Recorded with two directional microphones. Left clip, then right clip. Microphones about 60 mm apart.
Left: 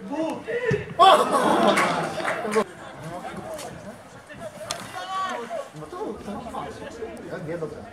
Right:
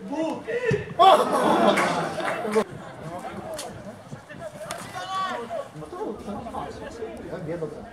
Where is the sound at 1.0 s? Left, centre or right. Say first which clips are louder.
Left 1 dB; left.